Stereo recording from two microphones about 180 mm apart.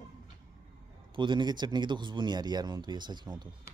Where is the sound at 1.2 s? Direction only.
25° right (ahead or behind).